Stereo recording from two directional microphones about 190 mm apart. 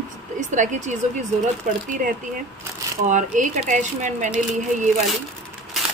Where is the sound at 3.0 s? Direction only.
40° right (ahead or behind).